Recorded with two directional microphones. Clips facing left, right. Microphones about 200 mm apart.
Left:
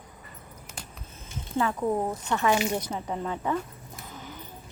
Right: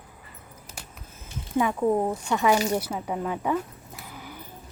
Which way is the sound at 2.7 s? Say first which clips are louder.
Right 3 dB; 10° right (ahead or behind).